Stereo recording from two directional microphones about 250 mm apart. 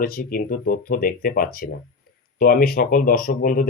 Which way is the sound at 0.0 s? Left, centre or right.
Left.